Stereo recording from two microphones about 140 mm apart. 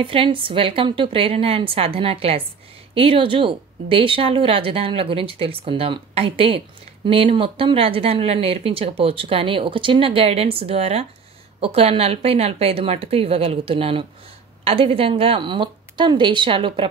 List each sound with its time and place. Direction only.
0.0 s speech: 40° right (ahead or behind)